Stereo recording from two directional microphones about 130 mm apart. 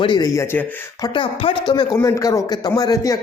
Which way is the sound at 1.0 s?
40° left (ahead or behind).